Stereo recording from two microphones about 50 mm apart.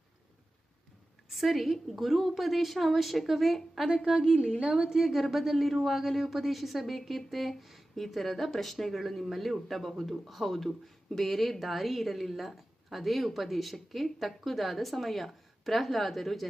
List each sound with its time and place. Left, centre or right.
1.3 s speech: centre
3.8 s a woman's voice: centre